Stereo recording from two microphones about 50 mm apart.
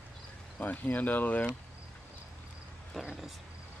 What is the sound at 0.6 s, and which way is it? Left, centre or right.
Speech, left.